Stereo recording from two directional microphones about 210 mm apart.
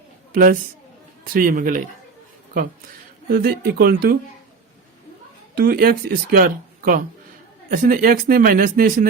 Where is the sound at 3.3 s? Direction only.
50° right (ahead or behind).